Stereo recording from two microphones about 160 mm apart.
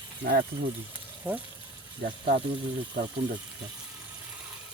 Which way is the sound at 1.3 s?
10° right (ahead or behind).